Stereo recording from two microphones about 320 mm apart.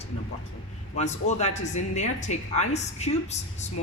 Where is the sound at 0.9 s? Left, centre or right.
Left.